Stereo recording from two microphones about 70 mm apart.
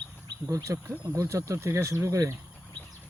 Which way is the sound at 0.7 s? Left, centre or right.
Right.